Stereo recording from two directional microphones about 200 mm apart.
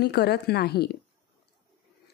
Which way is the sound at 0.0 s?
55° left (ahead or behind).